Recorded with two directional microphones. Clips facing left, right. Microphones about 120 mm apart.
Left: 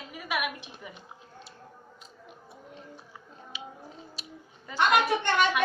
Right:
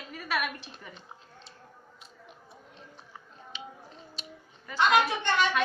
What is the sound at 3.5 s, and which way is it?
Scissors, 5° left (ahead or behind).